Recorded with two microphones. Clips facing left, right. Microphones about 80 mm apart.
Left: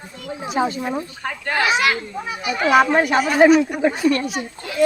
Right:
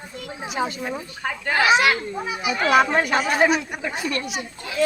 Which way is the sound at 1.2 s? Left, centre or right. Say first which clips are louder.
Right 2 dB; centre.